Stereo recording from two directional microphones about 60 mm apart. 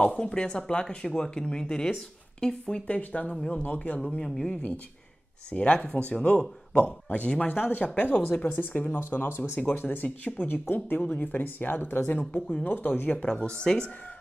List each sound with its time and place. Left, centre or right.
0.0 s speech: centre
2.9 s speech: left
3.6 s speech: left
4.2 s speech: centre; by 13.2 s left
13.2 s speech: centre